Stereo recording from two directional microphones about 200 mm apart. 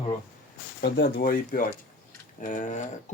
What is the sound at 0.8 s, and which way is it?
Speech, 50° left (ahead or behind).